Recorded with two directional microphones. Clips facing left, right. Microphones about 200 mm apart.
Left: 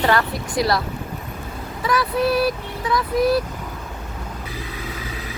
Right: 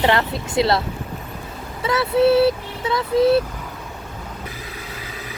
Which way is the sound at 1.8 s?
25° right (ahead or behind).